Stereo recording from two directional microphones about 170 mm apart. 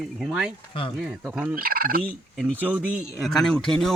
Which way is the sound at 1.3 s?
10° right (ahead or behind).